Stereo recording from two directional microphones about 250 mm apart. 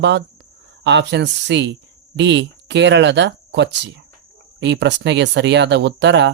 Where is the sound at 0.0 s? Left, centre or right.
Right.